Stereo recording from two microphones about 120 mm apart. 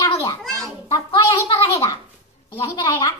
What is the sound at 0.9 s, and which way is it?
A child's voice, 30° left (ahead or behind).